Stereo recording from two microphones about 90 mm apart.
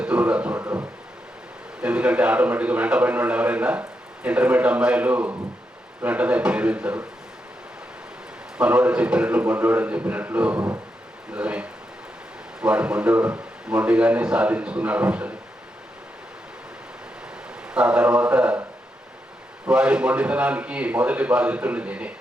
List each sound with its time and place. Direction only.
0.0 s speech: 15° right (ahead or behind)
0.6 s speech: 25° right (ahead or behind)
1.8 s a man's voice: 10° right (ahead or behind)
8.5 s a man's voice: 15° right (ahead or behind)
17.7 s speech: 15° right (ahead or behind)
19.6 s a man's voice: 15° right (ahead or behind)